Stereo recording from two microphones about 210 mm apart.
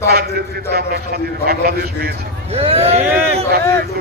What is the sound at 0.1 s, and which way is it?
A man's voice, 50° right (ahead or behind).